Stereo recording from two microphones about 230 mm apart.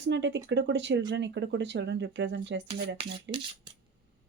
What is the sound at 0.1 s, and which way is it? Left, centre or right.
A woman's voice, right.